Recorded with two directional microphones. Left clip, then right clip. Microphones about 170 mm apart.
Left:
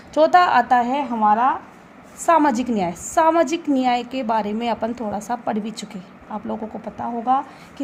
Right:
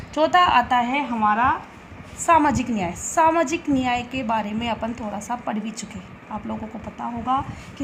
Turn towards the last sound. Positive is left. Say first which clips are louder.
# left 4 dB
turn(degrees=65)  # may be behind; listen again after turning